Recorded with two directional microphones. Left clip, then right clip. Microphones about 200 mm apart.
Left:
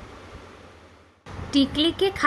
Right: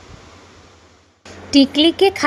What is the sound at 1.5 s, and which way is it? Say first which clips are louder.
Speech: right 8 dB; 30° right (ahead or behind).